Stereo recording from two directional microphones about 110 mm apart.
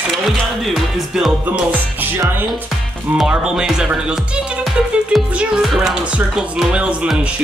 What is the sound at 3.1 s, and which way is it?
Speech, 5° right (ahead or behind).